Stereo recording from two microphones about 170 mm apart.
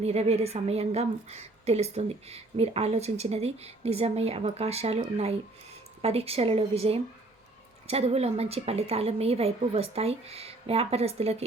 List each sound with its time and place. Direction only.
0.0 s a woman's voice: 40° right (ahead or behind)